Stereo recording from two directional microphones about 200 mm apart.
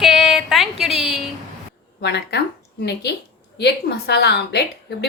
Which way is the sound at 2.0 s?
55° left (ahead or behind).